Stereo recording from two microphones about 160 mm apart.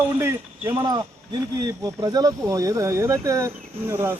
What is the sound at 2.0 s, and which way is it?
Speech, 20° right (ahead or behind).